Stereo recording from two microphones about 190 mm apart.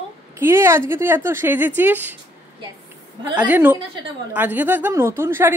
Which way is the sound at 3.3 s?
10° right (ahead or behind).